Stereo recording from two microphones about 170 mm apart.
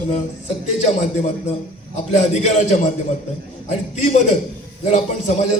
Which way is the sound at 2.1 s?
40° left (ahead or behind).